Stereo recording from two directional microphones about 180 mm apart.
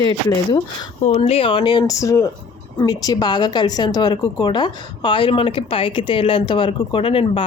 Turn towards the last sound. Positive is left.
turn(degrees=30)  # may be behind; listen again after turning